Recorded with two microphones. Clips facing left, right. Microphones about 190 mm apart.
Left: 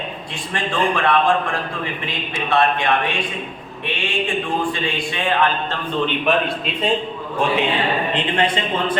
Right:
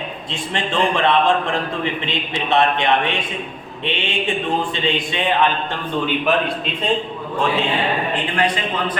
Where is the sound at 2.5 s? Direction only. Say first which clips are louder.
Right 1 dB; 20° right (ahead or behind).